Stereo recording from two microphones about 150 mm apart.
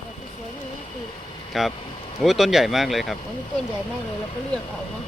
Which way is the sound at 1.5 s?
Centre (ahead or behind).